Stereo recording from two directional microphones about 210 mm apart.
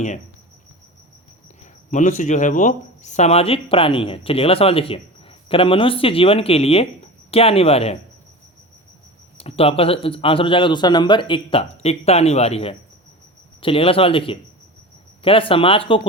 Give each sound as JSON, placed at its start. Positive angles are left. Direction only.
{"t": 1.9, "sound": "speech", "side_deg": 35}
{"t": 9.4, "sound": "speech", "side_deg": 30}